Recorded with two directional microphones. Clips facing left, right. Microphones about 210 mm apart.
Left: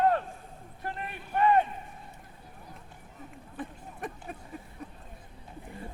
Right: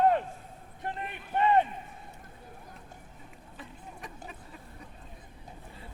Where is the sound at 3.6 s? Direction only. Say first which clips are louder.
Left 7 dB; 50° left (ahead or behind).